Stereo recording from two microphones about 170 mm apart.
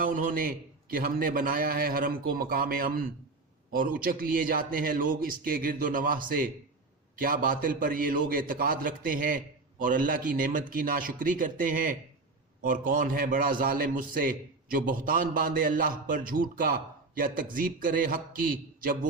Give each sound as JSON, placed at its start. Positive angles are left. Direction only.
{"t": 0.0, "sound": "a man's voice", "side_deg": -50}